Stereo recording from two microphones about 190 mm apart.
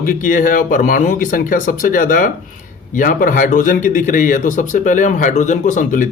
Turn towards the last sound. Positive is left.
turn(degrees=45)  # may be behind; listen again after turning